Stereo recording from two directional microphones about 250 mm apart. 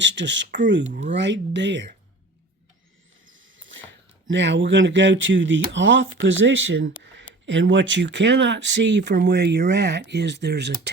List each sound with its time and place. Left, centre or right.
0.0 s speech: right
0.9 s speech: right
1.1 s speech: right
3.3 s a sound: right
4.3 s speech: right